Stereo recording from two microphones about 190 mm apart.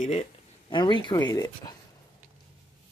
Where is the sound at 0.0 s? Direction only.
35° left (ahead or behind).